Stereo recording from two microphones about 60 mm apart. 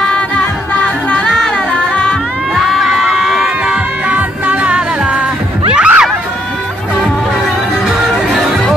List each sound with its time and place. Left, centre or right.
1.3 s music: centre
2.5 s crowd: centre
4.1 s music: right